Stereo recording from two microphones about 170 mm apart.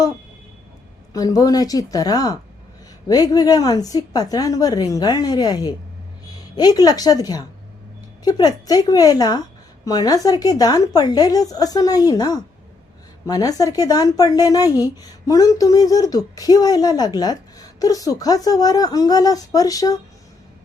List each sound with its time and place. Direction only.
1.1 s speech: 20° left (ahead or behind)